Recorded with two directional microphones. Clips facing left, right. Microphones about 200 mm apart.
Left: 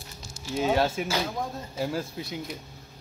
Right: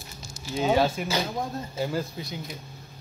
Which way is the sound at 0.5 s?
Centre (ahead or behind).